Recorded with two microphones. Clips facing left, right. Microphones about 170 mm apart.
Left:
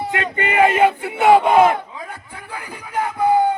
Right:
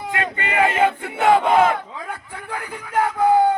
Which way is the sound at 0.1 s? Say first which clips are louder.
Right 1 dB; 20° left (ahead or behind).